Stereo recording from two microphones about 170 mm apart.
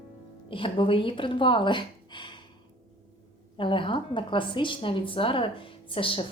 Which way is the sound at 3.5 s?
30° left (ahead or behind).